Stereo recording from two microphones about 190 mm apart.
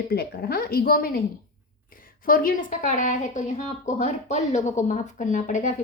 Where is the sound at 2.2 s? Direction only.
45° left (ahead or behind).